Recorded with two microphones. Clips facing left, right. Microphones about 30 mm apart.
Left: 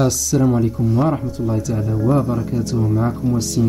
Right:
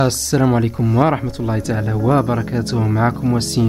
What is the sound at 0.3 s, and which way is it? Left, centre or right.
Speech, right.